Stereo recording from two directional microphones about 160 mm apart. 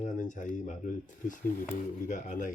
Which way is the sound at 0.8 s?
55° left (ahead or behind).